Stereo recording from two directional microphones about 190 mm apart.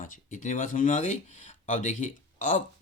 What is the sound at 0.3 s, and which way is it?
Speech, 40° left (ahead or behind).